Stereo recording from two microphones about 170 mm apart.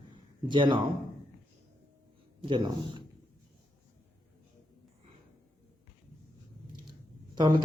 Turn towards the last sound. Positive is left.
turn(degrees=-25)  # may be behind; listen again after turning